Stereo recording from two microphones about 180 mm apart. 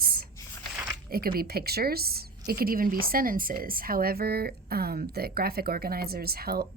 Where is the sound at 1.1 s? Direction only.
55° right (ahead or behind).